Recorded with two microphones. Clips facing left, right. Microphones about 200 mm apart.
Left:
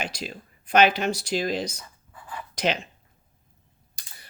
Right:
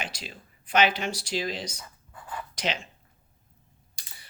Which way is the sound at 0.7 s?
45° left (ahead or behind).